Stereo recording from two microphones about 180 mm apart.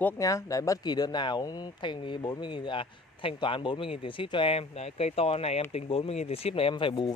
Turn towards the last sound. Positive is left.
turn(degrees=25)  # may be behind; listen again after turning